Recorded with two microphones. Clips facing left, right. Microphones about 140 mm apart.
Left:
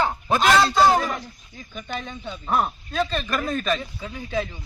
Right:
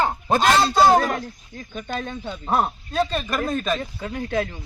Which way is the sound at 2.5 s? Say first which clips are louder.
Right 1 dB; 35° right (ahead or behind).